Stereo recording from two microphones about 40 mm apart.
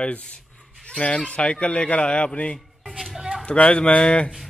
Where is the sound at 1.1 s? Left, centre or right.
Left.